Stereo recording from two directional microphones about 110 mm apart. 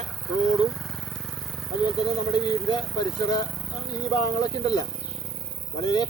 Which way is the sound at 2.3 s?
40° left (ahead or behind).